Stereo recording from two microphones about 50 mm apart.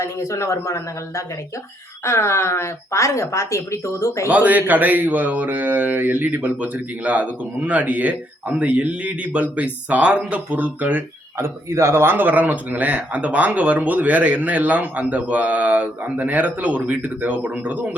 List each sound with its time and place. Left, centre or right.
0.0 s speech: left
2.0 s speech: left
4.3 s speech: right
11.3 s speech: right
12.1 s speech: right